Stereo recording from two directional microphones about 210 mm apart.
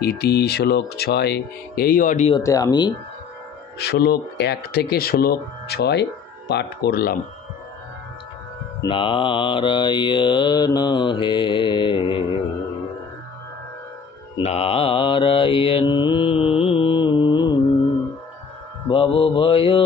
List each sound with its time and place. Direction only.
0.0 s speech: 50° left (ahead or behind)
2.3 s mantra: 15° left (ahead or behind)
3.7 s speech: 50° left (ahead or behind)
8.8 s mantra: 25° left (ahead or behind)
14.4 s mantra: 30° left (ahead or behind)
18.9 s mantra: 25° left (ahead or behind)